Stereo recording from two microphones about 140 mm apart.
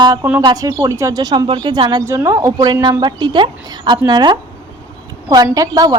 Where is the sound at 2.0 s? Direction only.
20° right (ahead or behind).